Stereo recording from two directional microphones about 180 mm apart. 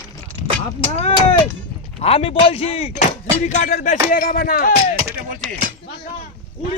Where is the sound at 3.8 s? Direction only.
50° left (ahead or behind).